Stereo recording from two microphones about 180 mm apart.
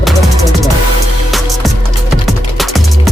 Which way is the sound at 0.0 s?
Centre (ahead or behind).